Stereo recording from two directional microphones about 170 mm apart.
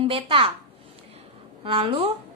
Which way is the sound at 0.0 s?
30° right (ahead or behind).